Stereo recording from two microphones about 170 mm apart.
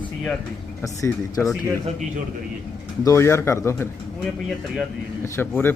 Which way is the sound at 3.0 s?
15° left (ahead or behind).